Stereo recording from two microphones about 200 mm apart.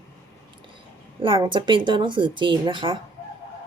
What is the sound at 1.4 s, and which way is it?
Speech, 25° right (ahead or behind).